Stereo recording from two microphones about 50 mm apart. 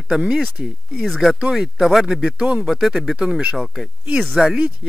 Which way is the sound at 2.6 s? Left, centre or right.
Centre.